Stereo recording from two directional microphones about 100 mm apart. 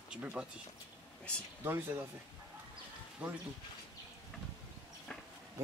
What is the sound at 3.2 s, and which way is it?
Speech, 10° right (ahead or behind).